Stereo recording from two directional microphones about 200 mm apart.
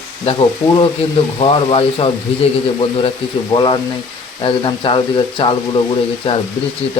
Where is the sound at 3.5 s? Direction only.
25° left (ahead or behind).